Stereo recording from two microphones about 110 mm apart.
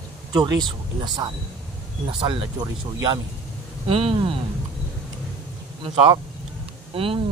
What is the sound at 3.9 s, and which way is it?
Speech, 55° right (ahead or behind).